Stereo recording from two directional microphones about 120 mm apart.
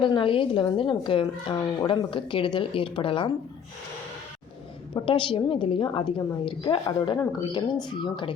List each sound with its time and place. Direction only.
0.0 s a woman's voice: 45° left (ahead or behind)
5.0 s a woman's voice: 45° left (ahead or behind)